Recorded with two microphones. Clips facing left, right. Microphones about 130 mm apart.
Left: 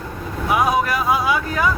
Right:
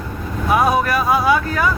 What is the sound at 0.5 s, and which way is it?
Speech, 20° left (ahead or behind).